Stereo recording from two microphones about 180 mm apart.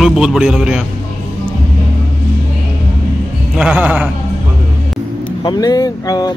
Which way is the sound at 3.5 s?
5° right (ahead or behind).